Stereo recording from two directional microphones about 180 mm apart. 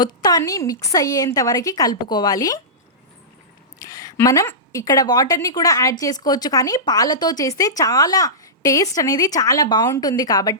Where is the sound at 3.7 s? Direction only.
20° left (ahead or behind).